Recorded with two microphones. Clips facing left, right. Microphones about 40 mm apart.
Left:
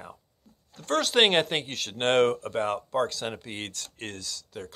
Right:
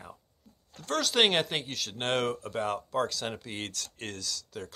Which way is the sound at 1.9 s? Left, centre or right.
Left.